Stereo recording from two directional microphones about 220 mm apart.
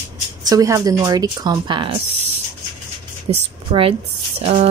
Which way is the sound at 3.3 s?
25° right (ahead or behind).